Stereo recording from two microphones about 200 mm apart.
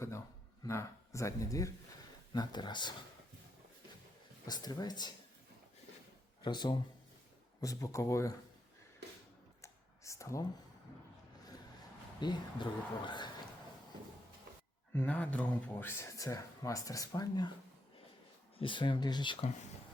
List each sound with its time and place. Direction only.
0.6 s speech: 15° left (ahead or behind)
4.4 s speech: 20° left (ahead or behind)
6.4 s speech: 20° left (ahead or behind)
9.6 s computer keyboard: 15° left (ahead or behind)
12.2 s speech: 20° left (ahead or behind)
14.9 s speech: 5° left (ahead or behind)
18.5 s speech: 25° left (ahead or behind)